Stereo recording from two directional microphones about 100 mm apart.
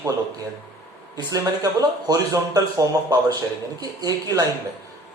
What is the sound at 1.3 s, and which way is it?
Speech, 35° right (ahead or behind).